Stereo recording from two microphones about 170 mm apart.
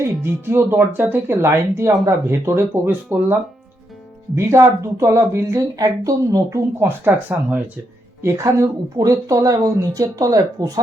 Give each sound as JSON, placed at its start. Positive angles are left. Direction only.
{"t": 0.0, "sound": "speech", "side_deg": -15}
{"t": 4.4, "sound": "speech", "side_deg": -15}